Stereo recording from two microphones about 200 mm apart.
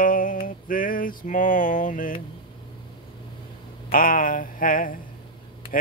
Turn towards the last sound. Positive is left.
turn(degrees=45)  # may be behind; listen again after turning